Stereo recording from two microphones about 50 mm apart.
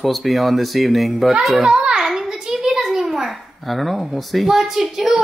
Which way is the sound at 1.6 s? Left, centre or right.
Centre.